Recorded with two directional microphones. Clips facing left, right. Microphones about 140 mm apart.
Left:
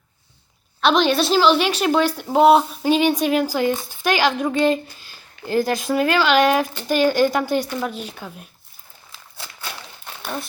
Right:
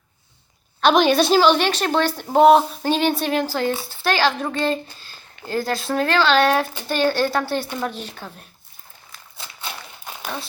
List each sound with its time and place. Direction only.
0.8 s speech: centre (ahead or behind)